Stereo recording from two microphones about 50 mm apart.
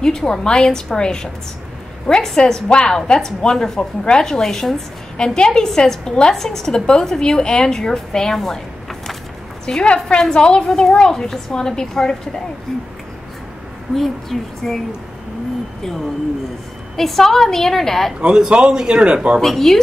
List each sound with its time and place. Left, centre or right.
0.0 s a woman's voice: centre
9.7 s a woman's voice: centre
13.9 s speech: centre
16.9 s a woman's voice: centre
18.2 s speech: centre
19.4 s a woman's voice: centre